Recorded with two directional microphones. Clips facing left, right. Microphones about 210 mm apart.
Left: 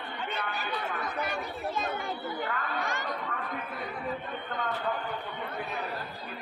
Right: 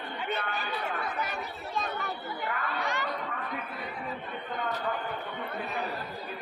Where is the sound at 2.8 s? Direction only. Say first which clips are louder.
Right 1 dB; 50° left (ahead or behind).